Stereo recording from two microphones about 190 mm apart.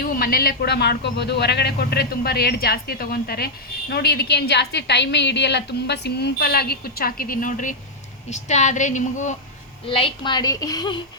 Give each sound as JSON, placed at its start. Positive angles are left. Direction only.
{"t": 0.0, "sound": "a woman's voice", "side_deg": 50}
{"t": 9.8, "sound": "a woman's voice", "side_deg": 30}